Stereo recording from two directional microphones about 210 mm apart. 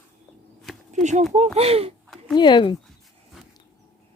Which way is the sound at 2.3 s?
20° left (ahead or behind).